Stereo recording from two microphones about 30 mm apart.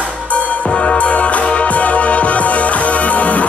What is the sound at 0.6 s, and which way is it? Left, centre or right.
Music, left.